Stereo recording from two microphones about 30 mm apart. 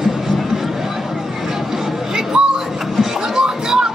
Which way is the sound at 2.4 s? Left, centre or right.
Right.